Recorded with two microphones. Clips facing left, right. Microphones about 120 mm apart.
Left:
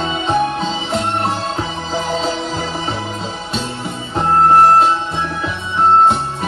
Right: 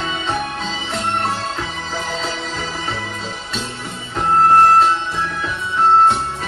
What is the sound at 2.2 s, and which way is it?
Music, 30° left (ahead or behind).